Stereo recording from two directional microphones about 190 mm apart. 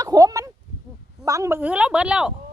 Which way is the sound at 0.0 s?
20° right (ahead or behind).